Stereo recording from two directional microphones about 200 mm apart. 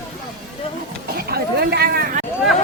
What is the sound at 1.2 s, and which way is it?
Chatter, 55° right (ahead or behind).